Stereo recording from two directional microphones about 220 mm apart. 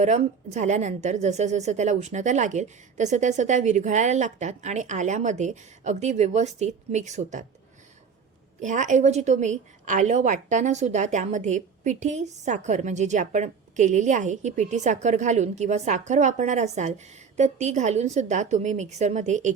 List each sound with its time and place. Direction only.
0.0 s a woman's voice: 30° right (ahead or behind)
8.6 s a woman's voice: 35° right (ahead or behind)